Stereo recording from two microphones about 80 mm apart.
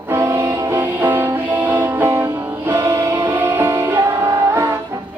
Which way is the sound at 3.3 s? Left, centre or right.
Right.